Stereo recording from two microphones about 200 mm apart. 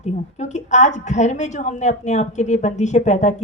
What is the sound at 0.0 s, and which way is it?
A woman's voice, 35° left (ahead or behind).